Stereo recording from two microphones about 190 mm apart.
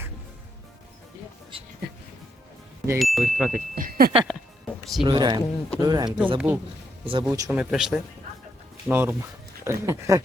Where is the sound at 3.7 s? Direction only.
45° right (ahead or behind).